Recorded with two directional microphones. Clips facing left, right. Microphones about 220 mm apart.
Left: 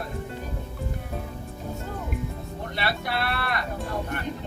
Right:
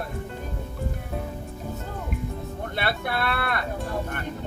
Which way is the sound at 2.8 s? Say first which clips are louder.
Right 1 dB; 55° right (ahead or behind).